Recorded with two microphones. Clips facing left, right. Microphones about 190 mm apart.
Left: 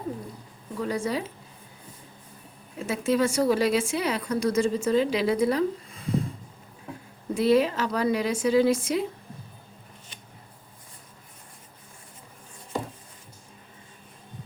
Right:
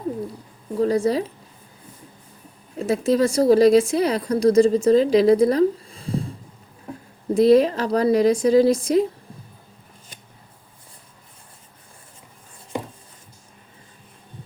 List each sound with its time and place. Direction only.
0.8 s speech: 35° right (ahead or behind)
2.7 s speech: 40° right (ahead or behind)
7.3 s speech: 40° right (ahead or behind)